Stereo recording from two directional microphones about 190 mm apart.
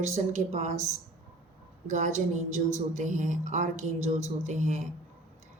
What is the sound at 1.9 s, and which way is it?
Speech, 40° right (ahead or behind).